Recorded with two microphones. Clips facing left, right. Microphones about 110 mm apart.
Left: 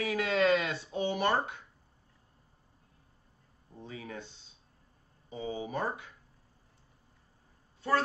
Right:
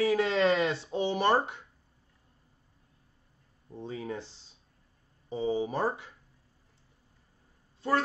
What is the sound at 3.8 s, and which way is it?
Speech, 30° right (ahead or behind).